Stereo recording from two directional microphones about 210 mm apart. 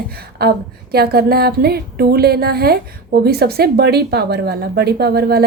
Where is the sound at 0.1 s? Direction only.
50° right (ahead or behind).